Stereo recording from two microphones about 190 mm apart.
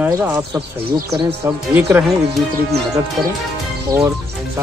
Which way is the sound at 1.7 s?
10° right (ahead or behind).